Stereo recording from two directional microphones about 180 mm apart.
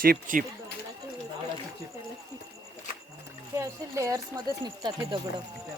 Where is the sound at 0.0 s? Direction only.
50° right (ahead or behind).